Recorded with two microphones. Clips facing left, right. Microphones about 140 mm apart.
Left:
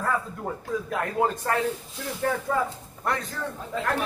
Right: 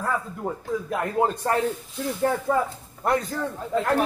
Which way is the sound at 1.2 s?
25° right (ahead or behind).